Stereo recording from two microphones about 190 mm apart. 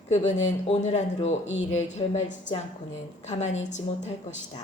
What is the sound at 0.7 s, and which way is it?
Speech, 35° left (ahead or behind).